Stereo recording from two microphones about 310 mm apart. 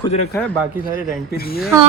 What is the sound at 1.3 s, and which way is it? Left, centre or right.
Speech, left.